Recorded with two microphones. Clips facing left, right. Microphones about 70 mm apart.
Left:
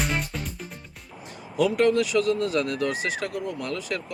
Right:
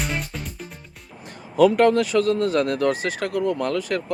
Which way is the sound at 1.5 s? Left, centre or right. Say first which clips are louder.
Right 5 dB; right.